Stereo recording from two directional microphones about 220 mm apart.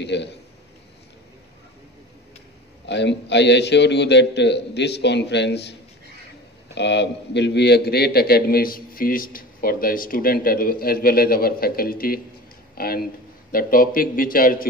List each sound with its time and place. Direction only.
0.0 s a man's voice: 50° left (ahead or behind)
2.9 s a man's voice: 50° left (ahead or behind)